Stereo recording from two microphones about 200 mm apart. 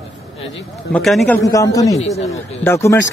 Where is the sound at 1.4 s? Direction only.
15° left (ahead or behind).